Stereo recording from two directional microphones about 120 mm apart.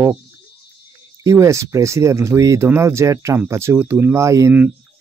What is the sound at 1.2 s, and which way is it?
Speech, 25° right (ahead or behind).